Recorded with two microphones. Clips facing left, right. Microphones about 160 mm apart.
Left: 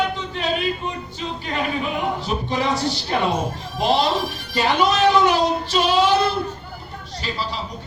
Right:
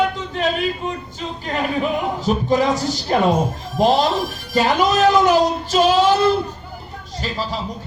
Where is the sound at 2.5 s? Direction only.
45° right (ahead or behind).